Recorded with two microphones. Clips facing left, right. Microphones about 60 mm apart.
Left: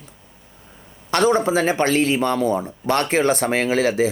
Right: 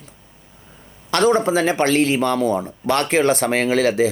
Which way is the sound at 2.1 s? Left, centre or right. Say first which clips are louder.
Right 1 dB; left.